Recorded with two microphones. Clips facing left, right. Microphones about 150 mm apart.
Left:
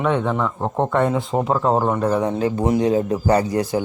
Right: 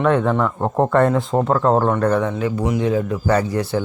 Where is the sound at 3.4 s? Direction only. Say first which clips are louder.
Left 1 dB; 15° left (ahead or behind).